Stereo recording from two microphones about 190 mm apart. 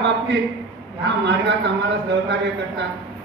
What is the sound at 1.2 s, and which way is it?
A man's voice, 65° right (ahead or behind).